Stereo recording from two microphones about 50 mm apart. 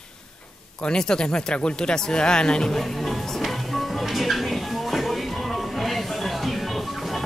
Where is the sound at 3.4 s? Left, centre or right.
Centre.